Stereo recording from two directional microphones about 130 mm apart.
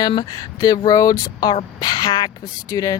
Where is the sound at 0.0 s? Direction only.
30° left (ahead or behind).